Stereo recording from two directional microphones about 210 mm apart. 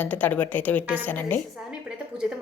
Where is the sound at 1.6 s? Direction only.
5° right (ahead or behind).